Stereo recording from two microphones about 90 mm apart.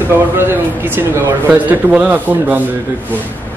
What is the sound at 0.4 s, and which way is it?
A man's voice, 25° right (ahead or behind).